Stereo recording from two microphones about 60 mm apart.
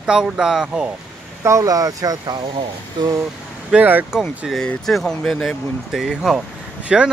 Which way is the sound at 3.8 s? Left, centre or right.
Right.